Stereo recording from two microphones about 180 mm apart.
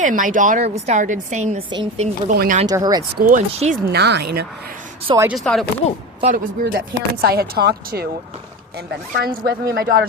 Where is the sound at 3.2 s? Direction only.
50° right (ahead or behind).